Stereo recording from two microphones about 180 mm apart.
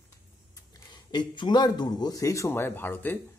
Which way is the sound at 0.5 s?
20° left (ahead or behind).